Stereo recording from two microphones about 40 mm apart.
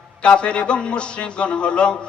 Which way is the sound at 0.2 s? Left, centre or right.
Left.